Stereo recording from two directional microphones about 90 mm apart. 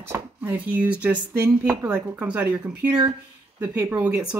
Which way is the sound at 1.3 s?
30° right (ahead or behind).